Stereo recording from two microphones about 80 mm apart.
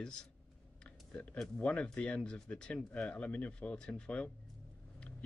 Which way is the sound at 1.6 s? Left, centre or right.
Centre.